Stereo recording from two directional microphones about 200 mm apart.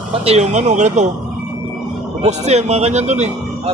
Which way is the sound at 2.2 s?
35° right (ahead or behind).